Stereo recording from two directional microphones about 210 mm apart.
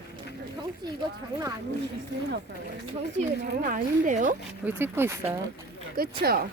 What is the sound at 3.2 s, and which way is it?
Speech, 40° right (ahead or behind).